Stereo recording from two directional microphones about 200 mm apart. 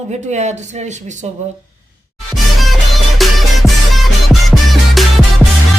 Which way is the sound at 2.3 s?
Centre (ahead or behind).